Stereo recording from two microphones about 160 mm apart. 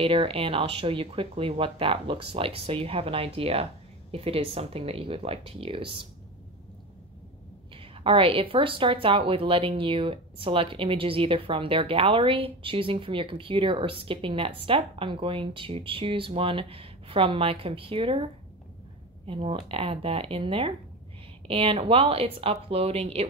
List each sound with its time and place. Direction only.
0.0 s speech: 35° right (ahead or behind)
7.7 s speech: 35° right (ahead or behind)
19.2 s speech: 35° right (ahead or behind)